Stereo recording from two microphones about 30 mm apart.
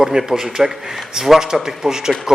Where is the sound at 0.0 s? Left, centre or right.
Right.